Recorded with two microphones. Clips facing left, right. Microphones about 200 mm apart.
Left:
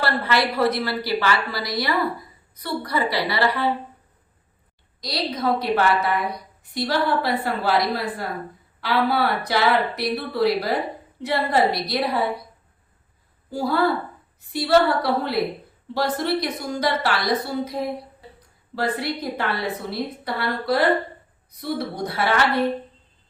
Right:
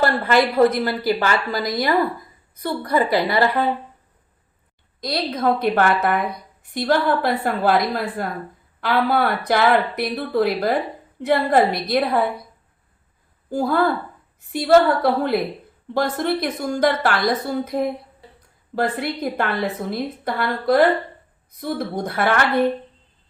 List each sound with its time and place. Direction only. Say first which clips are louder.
0.0 s a woman's voice: right 5 dB; 50° right (ahead or behind)
4.9 s a woman's voice: right 3 dB; 55° right (ahead or behind)
13.5 s a woman's voice: right 2 dB; 50° right (ahead or behind)